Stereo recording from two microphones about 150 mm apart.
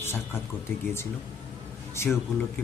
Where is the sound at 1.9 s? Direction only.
15° left (ahead or behind).